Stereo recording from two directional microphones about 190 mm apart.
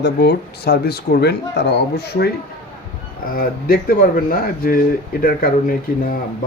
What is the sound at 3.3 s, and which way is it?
Speech, 50° left (ahead or behind).